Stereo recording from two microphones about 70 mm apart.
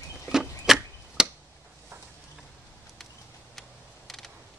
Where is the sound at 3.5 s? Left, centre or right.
Centre.